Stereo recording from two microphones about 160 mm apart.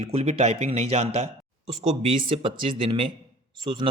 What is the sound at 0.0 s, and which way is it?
Speech, 40° right (ahead or behind).